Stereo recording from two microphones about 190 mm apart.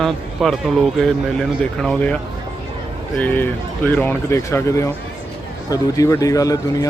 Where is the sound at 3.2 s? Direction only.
10° left (ahead or behind).